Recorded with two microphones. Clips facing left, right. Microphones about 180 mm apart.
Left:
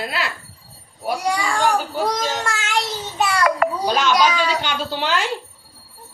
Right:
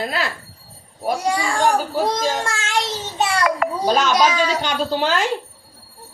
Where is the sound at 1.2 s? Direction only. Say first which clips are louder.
Left 1 dB; 25° right (ahead or behind).